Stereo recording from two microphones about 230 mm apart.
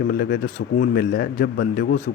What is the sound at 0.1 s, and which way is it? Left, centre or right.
Speech, left.